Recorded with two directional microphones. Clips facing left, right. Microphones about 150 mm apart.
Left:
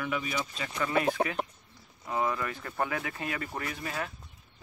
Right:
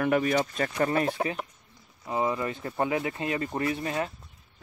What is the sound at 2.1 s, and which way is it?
Speech, 25° right (ahead or behind).